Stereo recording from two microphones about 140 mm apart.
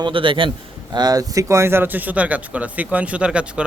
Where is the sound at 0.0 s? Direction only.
35° right (ahead or behind).